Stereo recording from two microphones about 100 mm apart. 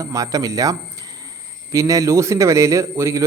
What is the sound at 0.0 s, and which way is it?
Speech, 35° right (ahead or behind).